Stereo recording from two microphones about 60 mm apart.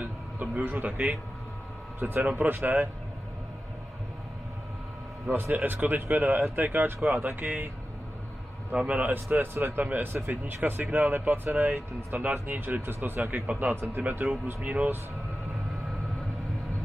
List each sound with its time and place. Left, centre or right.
0.0 s speech: right
2.0 s a man's voice: right
5.3 s a man's voice: right
8.7 s a man's voice: right